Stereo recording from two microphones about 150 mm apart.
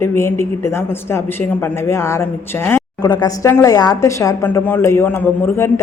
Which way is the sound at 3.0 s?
25° left (ahead or behind).